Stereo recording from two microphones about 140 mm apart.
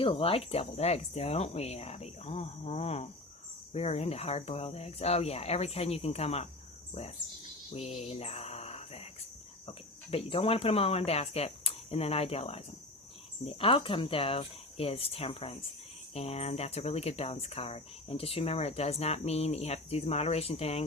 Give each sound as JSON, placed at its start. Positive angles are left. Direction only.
{"t": 0.0, "sound": "speech", "side_deg": 40}
{"t": 7.7, "sound": "speech", "side_deg": 50}